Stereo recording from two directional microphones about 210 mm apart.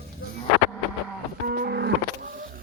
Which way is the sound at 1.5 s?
50° right (ahead or behind).